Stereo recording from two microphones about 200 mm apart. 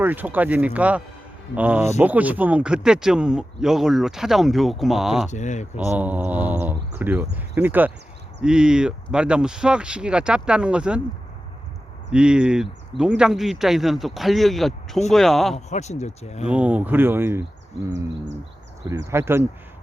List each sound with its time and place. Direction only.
0.0 s speech: 10° right (ahead or behind)
5.3 s speech: 35° left (ahead or behind)
5.7 s speech: 10° right (ahead or behind)
12.1 s speech: 5° right (ahead or behind)
15.5 s speech: 35° left (ahead or behind)
16.5 s speech: 5° right (ahead or behind)
18.9 s speech: 15° right (ahead or behind)